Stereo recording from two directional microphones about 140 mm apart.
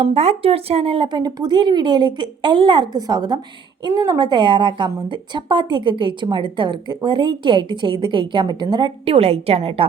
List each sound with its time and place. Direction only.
0.0 s a woman's voice: 50° right (ahead or behind); by 8.9 s 30° right (ahead or behind)
9.0 s a woman's voice: 45° right (ahead or behind)